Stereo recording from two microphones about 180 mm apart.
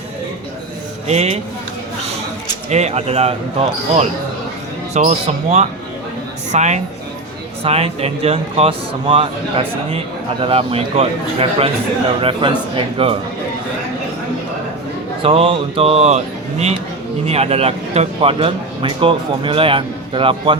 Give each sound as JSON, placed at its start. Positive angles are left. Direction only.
{"t": 1.0, "sound": "speech", "side_deg": -40}
{"t": 2.6, "sound": "speech", "side_deg": -40}
{"t": 10.4, "sound": "speech", "side_deg": -30}
{"t": 15.2, "sound": "speech", "side_deg": -30}